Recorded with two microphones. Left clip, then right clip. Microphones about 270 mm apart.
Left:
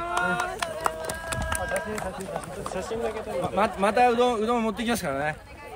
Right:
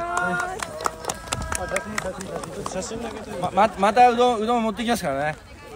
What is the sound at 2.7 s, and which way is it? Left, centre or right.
Speech, left.